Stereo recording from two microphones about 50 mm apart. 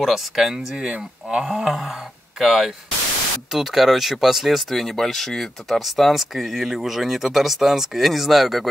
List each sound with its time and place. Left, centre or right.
0.0 s speech: centre
0.7 s speech: centre
1.4 s speech: centre